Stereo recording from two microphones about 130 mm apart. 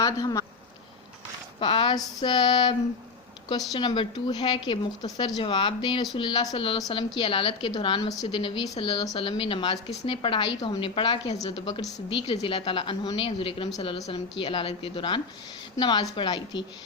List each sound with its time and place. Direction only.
0.0 s speech: 30° left (ahead or behind)
1.5 s a woman's voice: 40° left (ahead or behind)